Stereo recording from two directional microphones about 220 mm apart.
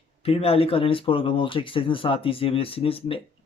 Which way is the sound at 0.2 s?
25° left (ahead or behind).